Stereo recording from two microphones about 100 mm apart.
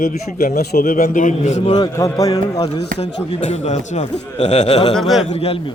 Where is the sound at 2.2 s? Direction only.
35° left (ahead or behind).